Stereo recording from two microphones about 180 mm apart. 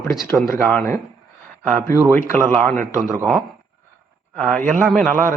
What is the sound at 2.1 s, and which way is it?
Speech, 10° left (ahead or behind).